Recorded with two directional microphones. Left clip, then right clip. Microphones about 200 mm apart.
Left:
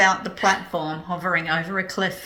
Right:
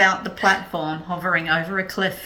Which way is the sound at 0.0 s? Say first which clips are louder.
Right 1 dB; 10° left (ahead or behind).